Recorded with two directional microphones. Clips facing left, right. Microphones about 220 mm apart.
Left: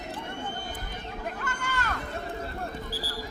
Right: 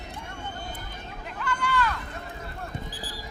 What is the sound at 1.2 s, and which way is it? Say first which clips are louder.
Hubbub: right 5 dB; 45° left (ahead or behind).